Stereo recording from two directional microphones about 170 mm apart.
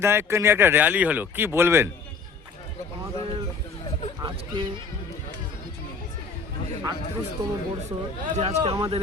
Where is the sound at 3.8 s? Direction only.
40° left (ahead or behind).